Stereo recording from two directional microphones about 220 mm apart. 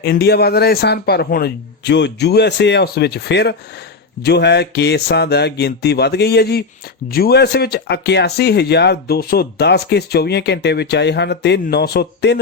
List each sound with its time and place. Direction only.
0.0 s speech: 45° left (ahead or behind)